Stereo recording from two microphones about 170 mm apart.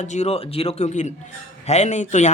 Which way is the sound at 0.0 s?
40° left (ahead or behind).